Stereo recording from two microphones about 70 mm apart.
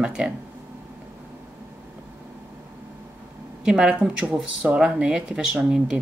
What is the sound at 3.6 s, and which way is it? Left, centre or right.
Speech, centre.